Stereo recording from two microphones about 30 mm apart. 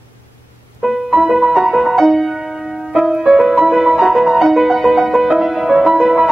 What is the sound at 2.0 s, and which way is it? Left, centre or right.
Music, centre.